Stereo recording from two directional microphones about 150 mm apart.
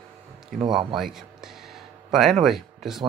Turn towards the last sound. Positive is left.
turn(degrees=0)  # may be behind; listen again after turning